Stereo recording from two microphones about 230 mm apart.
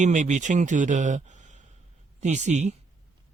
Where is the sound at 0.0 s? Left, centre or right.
Right.